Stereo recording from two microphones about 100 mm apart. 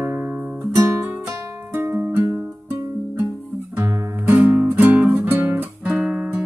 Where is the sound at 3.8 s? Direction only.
30° right (ahead or behind).